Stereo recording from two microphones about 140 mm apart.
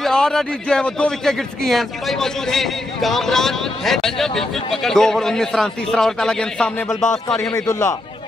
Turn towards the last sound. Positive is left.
turn(degrees=25)  # may be behind; listen again after turning